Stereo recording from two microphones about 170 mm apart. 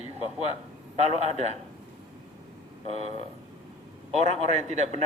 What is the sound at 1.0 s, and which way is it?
Speech, 40° right (ahead or behind).